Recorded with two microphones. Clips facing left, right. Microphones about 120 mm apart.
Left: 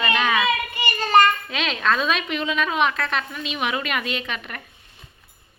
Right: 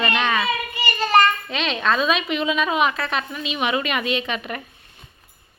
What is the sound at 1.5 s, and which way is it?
A woman's voice, centre (ahead or behind).